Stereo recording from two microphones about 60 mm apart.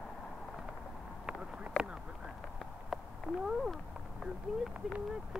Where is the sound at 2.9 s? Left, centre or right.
Centre.